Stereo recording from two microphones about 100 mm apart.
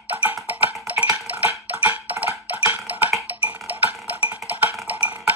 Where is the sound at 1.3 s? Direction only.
15° right (ahead or behind).